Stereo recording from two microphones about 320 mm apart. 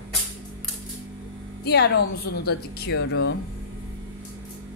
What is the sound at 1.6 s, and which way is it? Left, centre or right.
Speech, left.